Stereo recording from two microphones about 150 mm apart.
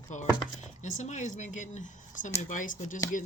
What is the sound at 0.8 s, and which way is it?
Speech, 55° left (ahead or behind).